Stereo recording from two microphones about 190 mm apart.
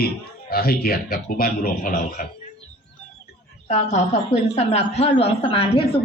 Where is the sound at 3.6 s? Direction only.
35° left (ahead or behind).